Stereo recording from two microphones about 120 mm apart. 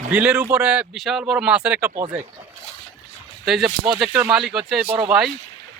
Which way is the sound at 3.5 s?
5° right (ahead or behind).